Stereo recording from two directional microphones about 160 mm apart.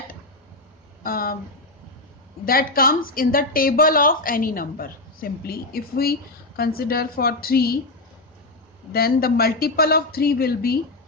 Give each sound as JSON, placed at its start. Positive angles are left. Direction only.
{"t": 1.0, "sound": "a woman's voice", "side_deg": 65}
{"t": 2.4, "sound": "a woman's voice", "side_deg": 65}
{"t": 8.9, "sound": "a woman's voice", "side_deg": 70}